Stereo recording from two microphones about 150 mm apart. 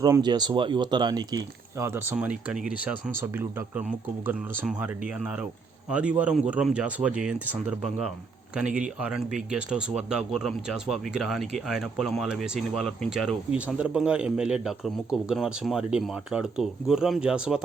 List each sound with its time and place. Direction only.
0.0 s speech: 25° right (ahead or behind); by 17.6 s 5° right (ahead or behind)